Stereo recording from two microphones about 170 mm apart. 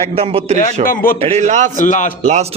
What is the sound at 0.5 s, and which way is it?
Speech, 55° left (ahead or behind).